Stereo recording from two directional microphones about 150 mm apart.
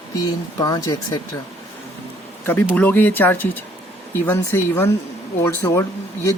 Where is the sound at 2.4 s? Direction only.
10° left (ahead or behind).